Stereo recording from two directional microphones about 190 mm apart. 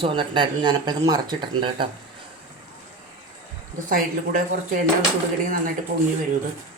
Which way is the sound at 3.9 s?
45° right (ahead or behind).